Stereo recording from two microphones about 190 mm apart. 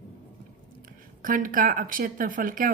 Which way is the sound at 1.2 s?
45° right (ahead or behind).